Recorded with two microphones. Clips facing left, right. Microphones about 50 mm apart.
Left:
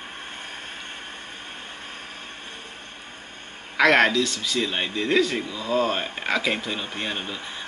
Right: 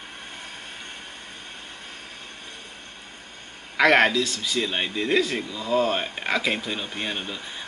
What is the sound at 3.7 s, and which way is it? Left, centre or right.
A man's voice, centre.